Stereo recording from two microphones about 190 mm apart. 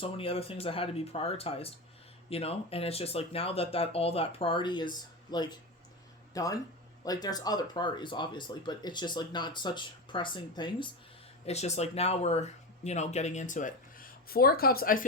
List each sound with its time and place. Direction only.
0.0 s speech: 30° left (ahead or behind)
11.4 s speech: 35° left (ahead or behind)